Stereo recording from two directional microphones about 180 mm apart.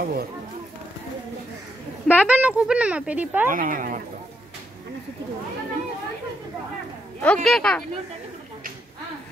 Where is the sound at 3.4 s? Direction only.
50° right (ahead or behind).